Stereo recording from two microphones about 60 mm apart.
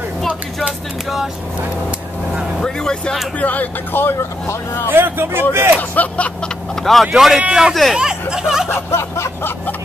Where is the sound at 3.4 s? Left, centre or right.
Left.